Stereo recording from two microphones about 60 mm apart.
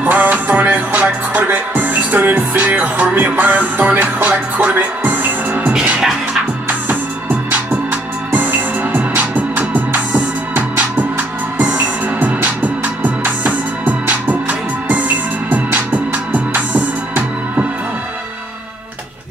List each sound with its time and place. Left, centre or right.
0.0 s music: right
5.7 s music: centre
6.7 s music: right